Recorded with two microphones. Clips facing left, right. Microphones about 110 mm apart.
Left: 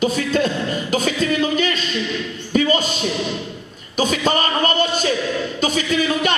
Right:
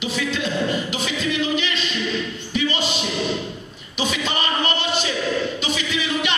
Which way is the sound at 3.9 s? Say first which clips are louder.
Left 6 dB; 45° left (ahead or behind).